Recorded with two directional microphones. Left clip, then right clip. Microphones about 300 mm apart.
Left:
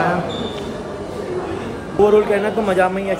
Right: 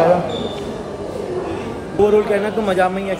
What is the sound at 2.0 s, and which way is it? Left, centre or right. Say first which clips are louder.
A man's voice: left 1 dB; centre.